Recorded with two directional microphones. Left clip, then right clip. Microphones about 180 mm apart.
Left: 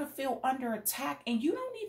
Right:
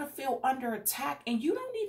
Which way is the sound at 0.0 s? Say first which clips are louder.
Right 2 dB; 30° left (ahead or behind).